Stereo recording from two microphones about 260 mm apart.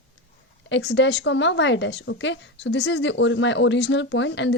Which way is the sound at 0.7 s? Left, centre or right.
Left.